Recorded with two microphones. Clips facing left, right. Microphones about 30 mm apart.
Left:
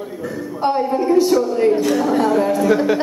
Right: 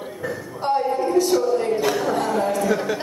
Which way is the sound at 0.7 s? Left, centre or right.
Left.